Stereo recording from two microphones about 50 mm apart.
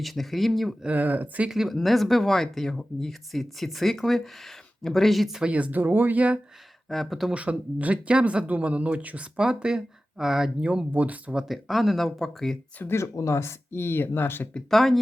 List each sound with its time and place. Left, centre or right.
0.0 s speech: centre
0.9 s speech: right
1.5 s speech: centre
5.4 s speech: right
5.8 s speech: right
6.8 s speech: centre
7.3 s speech: right; by 10.5 s centre
10.6 s speech: right
11.4 s speech: centre
12.8 s speech: left
13.1 s speech: left
14.7 s speech: centre